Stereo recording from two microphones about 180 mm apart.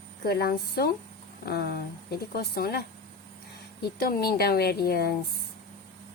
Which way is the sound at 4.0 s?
60° left (ahead or behind).